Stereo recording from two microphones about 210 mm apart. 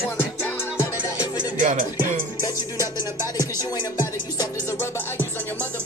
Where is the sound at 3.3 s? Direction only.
15° left (ahead or behind).